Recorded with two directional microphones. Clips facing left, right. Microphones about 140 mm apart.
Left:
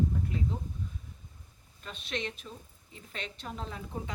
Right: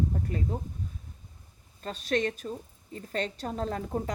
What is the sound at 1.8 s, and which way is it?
A woman's voice, 40° right (ahead or behind).